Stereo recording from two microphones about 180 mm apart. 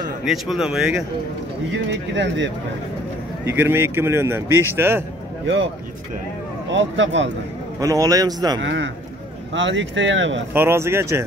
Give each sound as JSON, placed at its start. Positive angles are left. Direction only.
{"t": 0.2, "sound": "speech", "side_deg": 0}
{"t": 1.7, "sound": "speech", "side_deg": -75}
{"t": 3.4, "sound": "speech", "side_deg": -15}
{"t": 6.7, "sound": "speech", "side_deg": -90}
{"t": 7.8, "sound": "a man's voice", "side_deg": -20}
{"t": 8.6, "sound": "speech", "side_deg": -90}
{"t": 10.5, "sound": "speech", "side_deg": -15}